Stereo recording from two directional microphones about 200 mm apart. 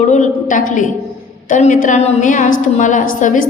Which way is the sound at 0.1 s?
40° left (ahead or behind).